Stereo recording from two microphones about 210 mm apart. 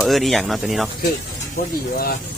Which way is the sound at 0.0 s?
Centre (ahead or behind).